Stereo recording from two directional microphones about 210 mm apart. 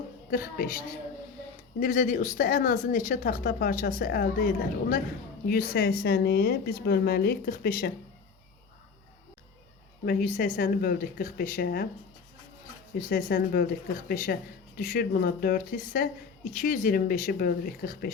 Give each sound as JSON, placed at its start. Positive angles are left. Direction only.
{"t": 0.3, "sound": "a woman's voice", "side_deg": 45}
{"t": 10.1, "sound": "a woman's voice", "side_deg": 40}
{"t": 13.0, "sound": "a woman's voice", "side_deg": 40}